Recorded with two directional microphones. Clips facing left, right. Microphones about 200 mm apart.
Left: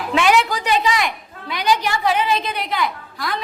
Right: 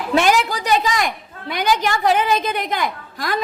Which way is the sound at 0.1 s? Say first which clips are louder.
Even; 40° right (ahead or behind).